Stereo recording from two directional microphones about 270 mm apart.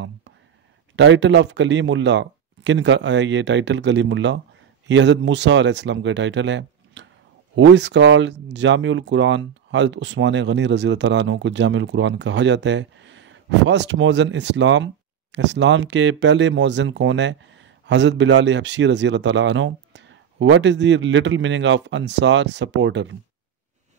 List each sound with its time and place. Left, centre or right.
0.9 s speech: right